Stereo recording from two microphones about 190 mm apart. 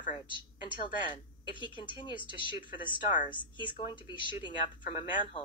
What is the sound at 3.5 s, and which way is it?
A woman's voice, 25° left (ahead or behind).